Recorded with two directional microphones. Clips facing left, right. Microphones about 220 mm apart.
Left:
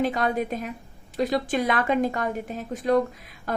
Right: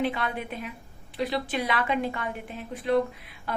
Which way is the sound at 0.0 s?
40° left (ahead or behind).